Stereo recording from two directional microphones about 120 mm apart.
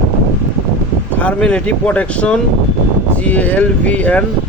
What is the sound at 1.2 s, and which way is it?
Speech, 10° left (ahead or behind).